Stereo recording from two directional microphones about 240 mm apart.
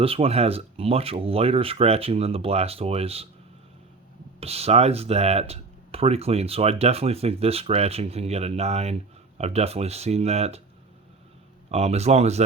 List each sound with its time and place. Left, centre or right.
0.0 s speech: right
4.4 s speech: right
11.7 s speech: right